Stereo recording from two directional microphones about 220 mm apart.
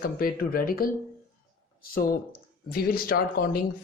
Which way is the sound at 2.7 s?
40° left (ahead or behind).